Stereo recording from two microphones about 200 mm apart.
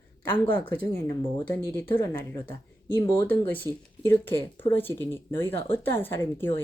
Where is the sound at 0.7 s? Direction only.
10° left (ahead or behind).